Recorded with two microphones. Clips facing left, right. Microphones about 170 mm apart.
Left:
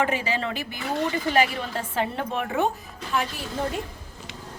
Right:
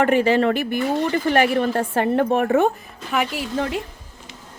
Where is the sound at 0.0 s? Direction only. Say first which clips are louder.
Right 9 dB; 55° right (ahead or behind).